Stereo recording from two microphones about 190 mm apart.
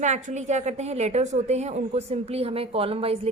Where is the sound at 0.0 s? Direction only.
40° right (ahead or behind).